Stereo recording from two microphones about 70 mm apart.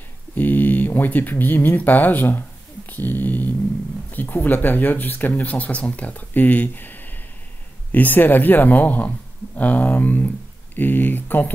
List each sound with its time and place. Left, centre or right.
0.4 s speech: left